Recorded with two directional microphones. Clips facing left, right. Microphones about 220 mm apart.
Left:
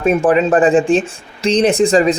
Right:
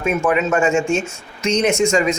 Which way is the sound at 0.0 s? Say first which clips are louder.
Left 5 dB; 35° left (ahead or behind).